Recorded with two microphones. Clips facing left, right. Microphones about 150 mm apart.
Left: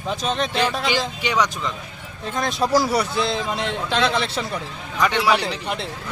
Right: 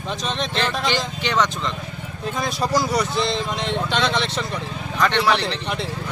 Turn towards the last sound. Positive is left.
turn(degrees=5)  # may be behind; listen again after turning